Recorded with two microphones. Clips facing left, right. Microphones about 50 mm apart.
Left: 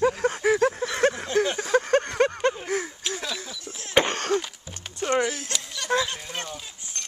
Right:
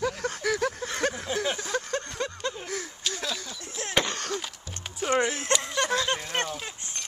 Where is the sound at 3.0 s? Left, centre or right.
Centre.